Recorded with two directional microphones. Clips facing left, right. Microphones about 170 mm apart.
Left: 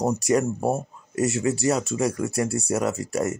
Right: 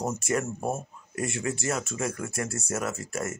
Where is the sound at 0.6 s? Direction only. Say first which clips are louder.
Left 6 dB; 35° left (ahead or behind).